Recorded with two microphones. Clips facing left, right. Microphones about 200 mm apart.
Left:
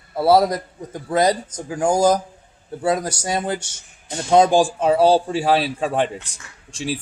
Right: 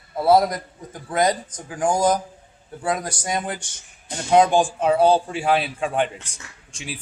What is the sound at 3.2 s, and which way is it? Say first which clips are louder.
Speech: left 3 dB; 30° left (ahead or behind).